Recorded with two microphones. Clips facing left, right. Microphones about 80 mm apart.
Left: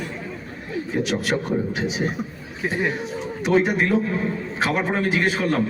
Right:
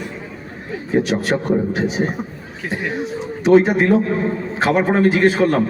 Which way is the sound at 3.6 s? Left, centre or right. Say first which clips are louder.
Right 5 dB; right.